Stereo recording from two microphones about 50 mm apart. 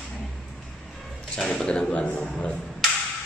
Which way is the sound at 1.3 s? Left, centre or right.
Centre.